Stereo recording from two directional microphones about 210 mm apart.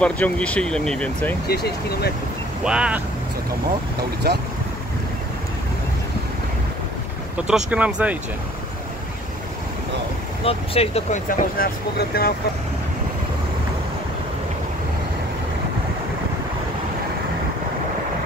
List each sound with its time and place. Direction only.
0.0 s speech: 5° left (ahead or behind)
1.5 s speech: 50° left (ahead or behind)
2.6 s speech: 5° right (ahead or behind)
4.2 s speech: 50° right (ahead or behind)
7.4 s speech: 5° right (ahead or behind)
10.4 s speech: 25° left (ahead or behind); by 12.4 s 45° left (ahead or behind)